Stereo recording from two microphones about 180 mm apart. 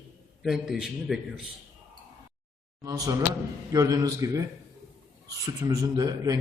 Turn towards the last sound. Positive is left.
turn(degrees=-20)  # may be behind; listen again after turning